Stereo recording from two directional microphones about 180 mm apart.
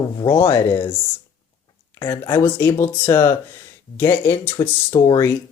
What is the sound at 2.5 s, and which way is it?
Speech, 15° left (ahead or behind).